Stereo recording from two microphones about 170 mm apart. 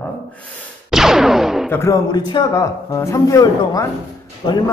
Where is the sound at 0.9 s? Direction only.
Centre (ahead or behind).